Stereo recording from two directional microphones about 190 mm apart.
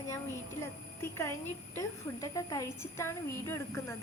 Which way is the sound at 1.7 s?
15° left (ahead or behind).